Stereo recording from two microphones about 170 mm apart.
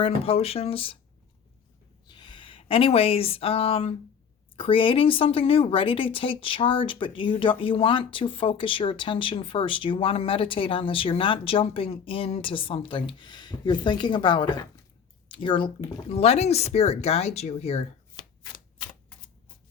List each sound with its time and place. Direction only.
0.0 s a woman's voice: 35° left (ahead or behind)
2.0 s a woman's voice: 25° left (ahead or behind)